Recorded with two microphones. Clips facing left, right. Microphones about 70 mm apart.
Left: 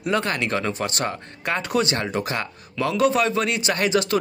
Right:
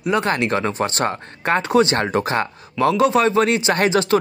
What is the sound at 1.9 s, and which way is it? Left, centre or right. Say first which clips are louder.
Speech: right 6 dB; right.